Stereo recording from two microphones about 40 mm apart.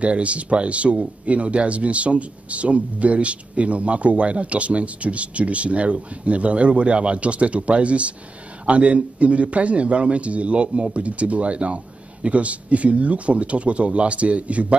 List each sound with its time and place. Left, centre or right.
0.0 s speech: right